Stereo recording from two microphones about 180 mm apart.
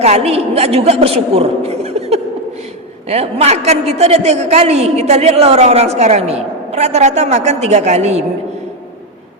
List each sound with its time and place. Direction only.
0.0 s a woman's voice: 35° right (ahead or behind)